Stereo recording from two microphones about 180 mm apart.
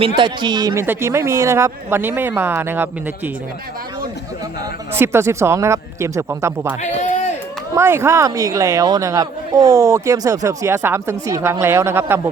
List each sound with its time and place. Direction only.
0.2 s speech: 25° right (ahead or behind)
4.9 s speech: 15° right (ahead or behind)
7.0 s run: 40° left (ahead or behind)
7.8 s speech: 15° right (ahead or behind)